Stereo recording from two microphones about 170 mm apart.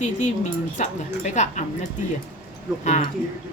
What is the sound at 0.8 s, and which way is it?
Speech, 45° left (ahead or behind).